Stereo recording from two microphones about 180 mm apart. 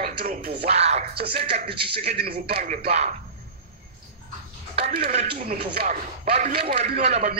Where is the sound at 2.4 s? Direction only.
50° right (ahead or behind).